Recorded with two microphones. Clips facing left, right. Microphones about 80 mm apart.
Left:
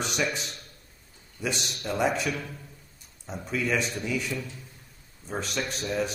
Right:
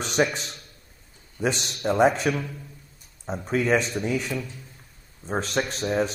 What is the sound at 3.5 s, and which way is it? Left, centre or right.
A man's voice, right.